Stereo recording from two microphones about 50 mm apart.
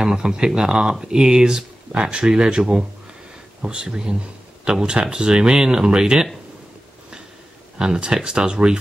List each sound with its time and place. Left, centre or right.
0.0 s speech: centre
7.8 s speech: centre